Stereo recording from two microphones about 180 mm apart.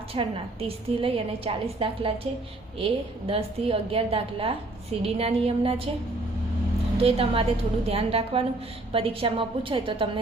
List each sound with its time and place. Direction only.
0.1 s a woman's voice: 30° right (ahead or behind)
7.0 s a woman's voice: 35° right (ahead or behind)